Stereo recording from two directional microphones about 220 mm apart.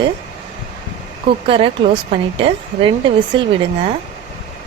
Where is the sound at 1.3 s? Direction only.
25° right (ahead or behind).